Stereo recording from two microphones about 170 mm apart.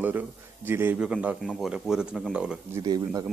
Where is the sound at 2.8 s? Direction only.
25° right (ahead or behind).